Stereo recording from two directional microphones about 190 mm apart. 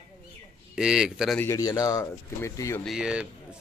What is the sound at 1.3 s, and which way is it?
Speech, 15° left (ahead or behind).